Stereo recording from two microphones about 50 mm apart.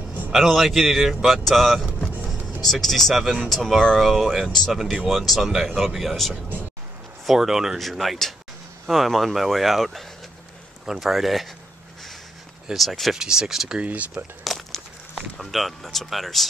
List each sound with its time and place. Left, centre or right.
0.3 s speech: centre
12.7 s speech: centre
13.1 s speech: centre
13.8 s speech: right
14.4 s crumpling: centre
15.3 s speech: centre